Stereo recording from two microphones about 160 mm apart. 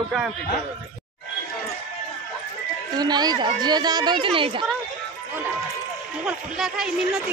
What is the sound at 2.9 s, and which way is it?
A woman's voice, 25° right (ahead or behind).